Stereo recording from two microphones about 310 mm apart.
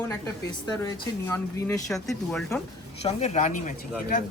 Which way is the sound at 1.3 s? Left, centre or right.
Centre.